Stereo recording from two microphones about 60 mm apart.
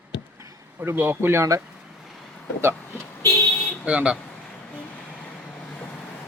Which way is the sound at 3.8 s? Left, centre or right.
Centre.